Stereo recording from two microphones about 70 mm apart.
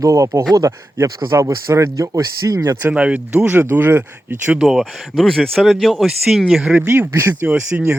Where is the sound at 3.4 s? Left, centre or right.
Right.